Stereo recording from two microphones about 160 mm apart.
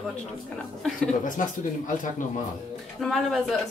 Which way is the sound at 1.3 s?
55° left (ahead or behind).